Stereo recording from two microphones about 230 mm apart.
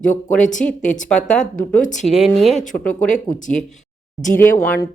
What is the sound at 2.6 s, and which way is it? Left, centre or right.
Speech, left.